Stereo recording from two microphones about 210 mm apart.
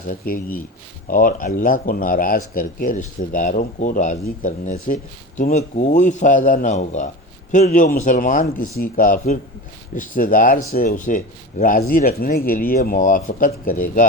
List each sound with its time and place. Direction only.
0.1 s speech: 40° left (ahead or behind)